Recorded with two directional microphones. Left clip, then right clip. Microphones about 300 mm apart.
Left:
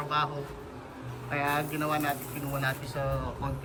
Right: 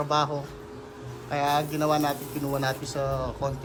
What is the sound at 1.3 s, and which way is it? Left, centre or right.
A man's voice, centre.